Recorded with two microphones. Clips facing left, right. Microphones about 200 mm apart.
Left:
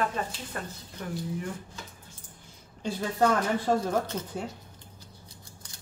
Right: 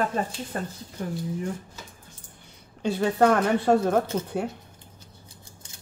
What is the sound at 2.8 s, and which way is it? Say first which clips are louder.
Speech: right 5 dB; 65° right (ahead or behind).